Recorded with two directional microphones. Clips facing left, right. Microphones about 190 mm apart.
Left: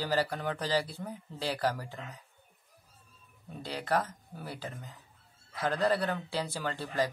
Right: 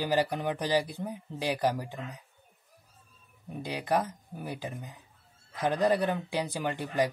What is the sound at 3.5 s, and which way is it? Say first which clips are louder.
Speech: right 2 dB; 15° right (ahead or behind).